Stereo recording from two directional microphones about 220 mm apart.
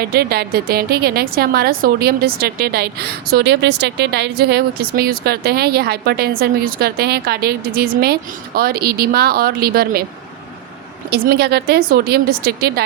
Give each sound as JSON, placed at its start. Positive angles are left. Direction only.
{"t": 0.1, "sound": "a woman's voice", "side_deg": -45}
{"t": 11.1, "sound": "a woman's voice", "side_deg": -45}